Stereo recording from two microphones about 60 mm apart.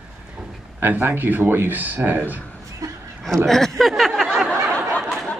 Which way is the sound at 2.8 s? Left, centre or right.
Right.